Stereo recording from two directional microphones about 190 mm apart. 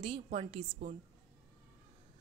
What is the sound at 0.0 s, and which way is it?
Speech, 30° right (ahead or behind).